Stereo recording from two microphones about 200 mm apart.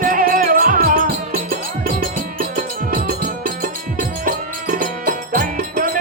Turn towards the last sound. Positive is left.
turn(degrees=-45)  # may be behind; listen again after turning